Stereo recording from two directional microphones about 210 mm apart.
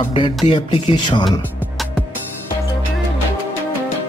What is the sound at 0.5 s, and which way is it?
Speech, 25° left (ahead or behind).